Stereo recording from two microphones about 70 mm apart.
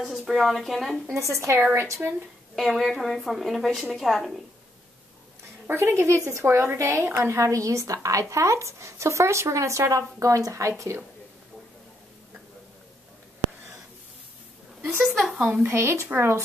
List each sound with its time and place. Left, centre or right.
0.0 s a woman's voice: centre
1.1 s a woman's voice: right
2.5 s a woman's voice: centre
5.7 s a woman's voice: right
6.4 s a woman's voice: right
15.0 s a woman's voice: centre
15.6 s a woman's voice: right